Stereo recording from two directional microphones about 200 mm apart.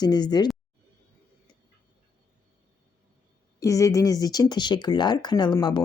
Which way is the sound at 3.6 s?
15° left (ahead or behind).